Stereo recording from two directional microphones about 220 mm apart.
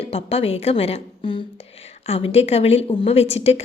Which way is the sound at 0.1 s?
25° left (ahead or behind).